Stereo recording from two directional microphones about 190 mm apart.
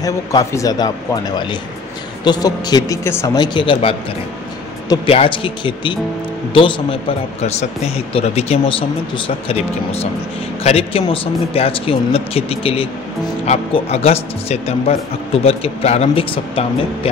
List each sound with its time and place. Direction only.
0.0 s a man's voice: 20° left (ahead or behind)
3.5 s a man's voice: 25° left (ahead or behind)
10.6 s speech: 30° left (ahead or behind)